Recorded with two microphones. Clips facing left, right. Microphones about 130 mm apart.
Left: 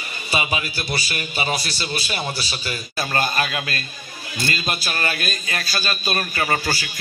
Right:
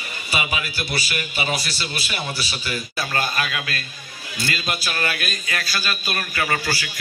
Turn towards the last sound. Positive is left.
turn(degrees=30)  # may be behind; listen again after turning